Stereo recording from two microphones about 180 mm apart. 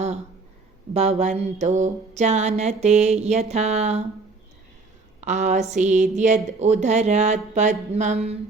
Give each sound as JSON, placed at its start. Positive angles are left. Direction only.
{"t": 0.9, "sound": "a woman's voice", "side_deg": -40}
{"t": 5.2, "sound": "a woman's voice", "side_deg": -40}